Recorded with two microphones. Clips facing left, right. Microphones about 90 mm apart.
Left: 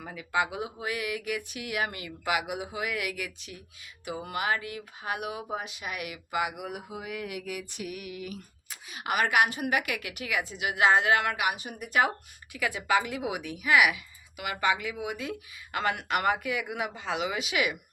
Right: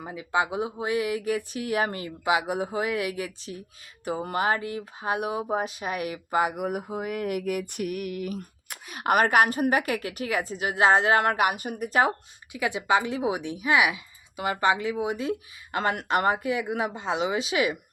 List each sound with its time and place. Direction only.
0.0 s a woman's voice: 20° right (ahead or behind)
2.2 s a woman's voice: 25° right (ahead or behind)
2.5 s speech: 35° right (ahead or behind)
11.9 s speech: 30° right (ahead or behind)
12.5 s a woman's voice: 20° right (ahead or behind)